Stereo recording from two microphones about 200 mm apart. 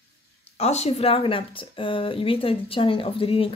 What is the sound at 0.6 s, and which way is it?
Speech, 35° left (ahead or behind).